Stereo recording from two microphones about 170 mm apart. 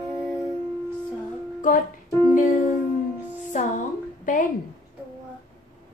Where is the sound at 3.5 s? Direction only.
45° left (ahead or behind).